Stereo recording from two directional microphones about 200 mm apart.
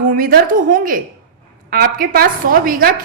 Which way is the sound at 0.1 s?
45° right (ahead or behind).